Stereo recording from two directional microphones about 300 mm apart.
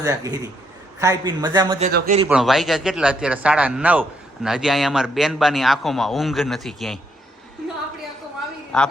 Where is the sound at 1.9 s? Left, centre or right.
Right.